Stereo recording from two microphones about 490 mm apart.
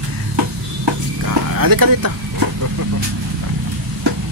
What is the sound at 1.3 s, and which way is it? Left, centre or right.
Speech, right.